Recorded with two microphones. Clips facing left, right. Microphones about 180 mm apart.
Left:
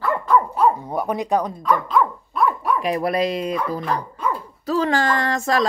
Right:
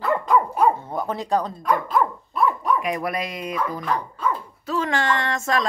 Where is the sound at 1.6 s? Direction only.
45° right (ahead or behind).